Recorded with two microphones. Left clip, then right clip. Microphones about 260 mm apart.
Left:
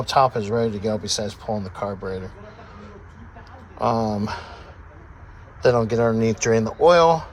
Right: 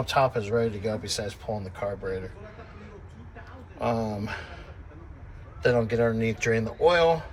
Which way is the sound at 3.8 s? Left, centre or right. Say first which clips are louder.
Left 7 dB; centre.